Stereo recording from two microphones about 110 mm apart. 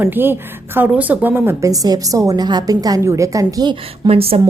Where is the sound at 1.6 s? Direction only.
35° right (ahead or behind).